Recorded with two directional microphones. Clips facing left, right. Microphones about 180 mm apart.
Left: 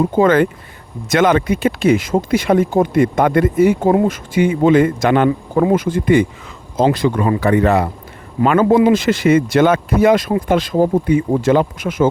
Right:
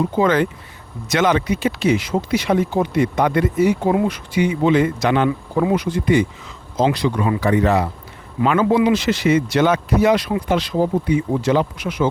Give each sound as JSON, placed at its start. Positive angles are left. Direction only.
{"t": 0.0, "sound": "speech", "side_deg": 50}
{"t": 8.4, "sound": "speech", "side_deg": 45}